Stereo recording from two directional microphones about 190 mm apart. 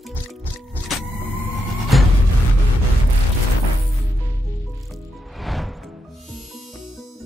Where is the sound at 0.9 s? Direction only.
Centre (ahead or behind).